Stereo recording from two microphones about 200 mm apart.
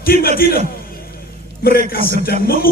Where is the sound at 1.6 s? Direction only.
50° left (ahead or behind).